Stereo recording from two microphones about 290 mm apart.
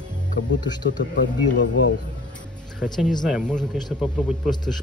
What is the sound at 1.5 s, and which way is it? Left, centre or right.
Speech, left.